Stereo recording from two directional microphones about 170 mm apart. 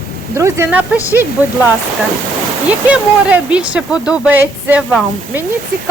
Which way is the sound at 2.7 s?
10° right (ahead or behind).